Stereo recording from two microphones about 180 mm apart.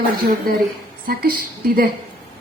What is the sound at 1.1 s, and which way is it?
Speech, 55° right (ahead or behind).